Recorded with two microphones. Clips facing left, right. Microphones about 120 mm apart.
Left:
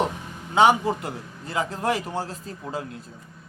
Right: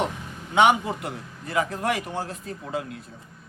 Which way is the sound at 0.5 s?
30° left (ahead or behind).